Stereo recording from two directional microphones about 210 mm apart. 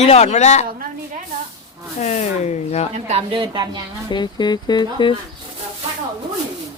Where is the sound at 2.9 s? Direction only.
30° right (ahead or behind).